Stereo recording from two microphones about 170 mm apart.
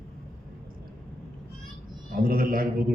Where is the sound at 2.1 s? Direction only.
55° right (ahead or behind).